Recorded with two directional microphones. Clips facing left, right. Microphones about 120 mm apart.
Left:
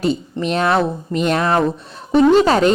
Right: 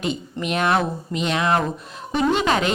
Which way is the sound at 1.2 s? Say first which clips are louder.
Left 4 dB; 40° left (ahead or behind).